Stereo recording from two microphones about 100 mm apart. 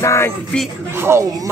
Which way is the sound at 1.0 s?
25° right (ahead or behind).